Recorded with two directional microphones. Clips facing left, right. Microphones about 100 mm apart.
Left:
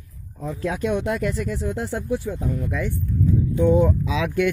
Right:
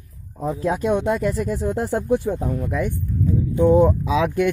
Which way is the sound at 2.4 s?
35° right (ahead or behind).